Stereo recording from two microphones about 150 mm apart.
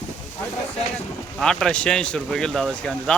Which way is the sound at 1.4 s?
5° left (ahead or behind).